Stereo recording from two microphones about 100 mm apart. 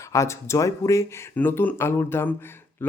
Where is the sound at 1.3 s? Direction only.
20° left (ahead or behind).